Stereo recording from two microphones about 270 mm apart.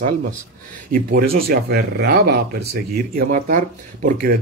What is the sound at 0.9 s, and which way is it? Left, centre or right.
Speech, right.